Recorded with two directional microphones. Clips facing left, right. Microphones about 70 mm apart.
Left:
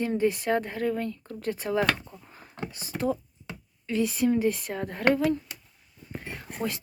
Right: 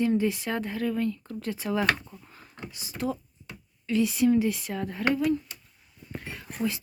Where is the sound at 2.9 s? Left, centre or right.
Left.